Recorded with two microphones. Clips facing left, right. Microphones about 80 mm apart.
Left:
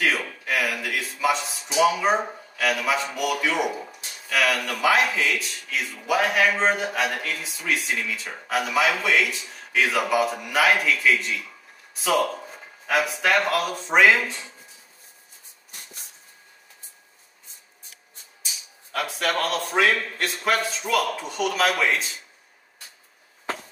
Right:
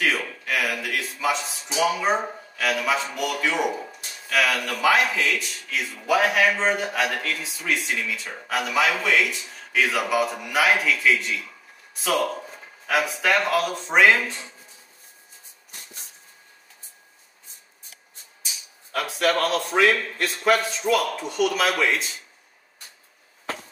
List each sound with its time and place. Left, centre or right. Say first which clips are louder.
0.0 s a sound: even; centre
1.8 s speech: left 2 dB; centre
18.9 s speech: right 3 dB; centre